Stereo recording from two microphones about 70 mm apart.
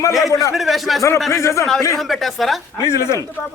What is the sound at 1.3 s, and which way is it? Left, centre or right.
Speech, left.